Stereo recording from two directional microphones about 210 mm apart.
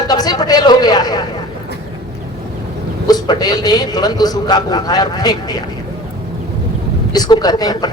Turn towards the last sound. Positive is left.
turn(degrees=20)  # may be behind; listen again after turning